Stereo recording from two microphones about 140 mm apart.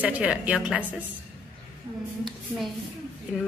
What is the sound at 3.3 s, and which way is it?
Speech, 10° right (ahead or behind).